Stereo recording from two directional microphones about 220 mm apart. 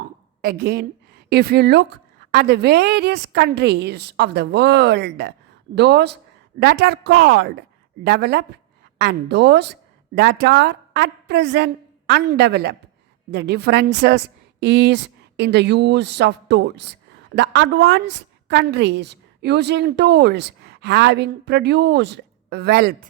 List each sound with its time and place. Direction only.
0.4 s a woman's voice: 45° right (ahead or behind)